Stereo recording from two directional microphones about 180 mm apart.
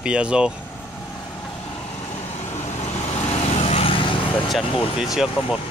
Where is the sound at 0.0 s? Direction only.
5° right (ahead or behind).